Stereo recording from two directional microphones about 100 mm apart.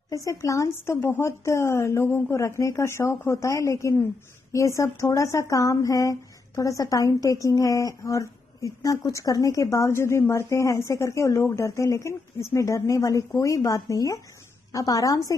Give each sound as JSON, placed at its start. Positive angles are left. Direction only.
{"t": 0.1, "sound": "a woman's voice", "side_deg": 35}